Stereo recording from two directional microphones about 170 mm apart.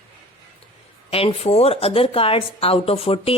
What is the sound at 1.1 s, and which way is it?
A woman's voice, 35° left (ahead or behind).